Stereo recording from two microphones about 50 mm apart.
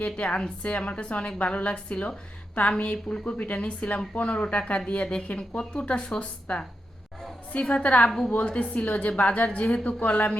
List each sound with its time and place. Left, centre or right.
0.0 s a woman's voice: left